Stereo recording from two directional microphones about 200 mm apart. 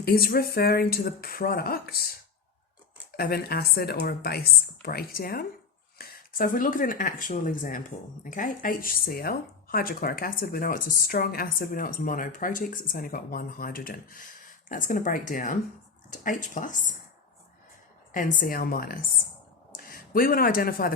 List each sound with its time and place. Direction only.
0.0 s speech: 50° left (ahead or behind)
3.2 s speech: 45° left (ahead or behind)
18.1 s speech: 40° left (ahead or behind)